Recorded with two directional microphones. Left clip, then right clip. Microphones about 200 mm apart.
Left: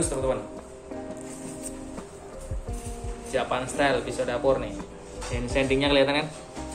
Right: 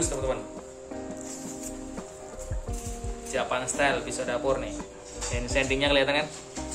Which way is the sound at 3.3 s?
5° right (ahead or behind).